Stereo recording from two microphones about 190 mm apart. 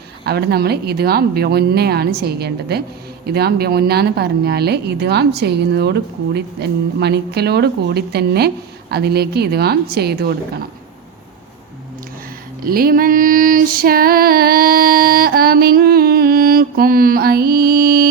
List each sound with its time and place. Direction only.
0.3 s speech: 60° right (ahead or behind)
12.6 s female singing: 50° right (ahead or behind)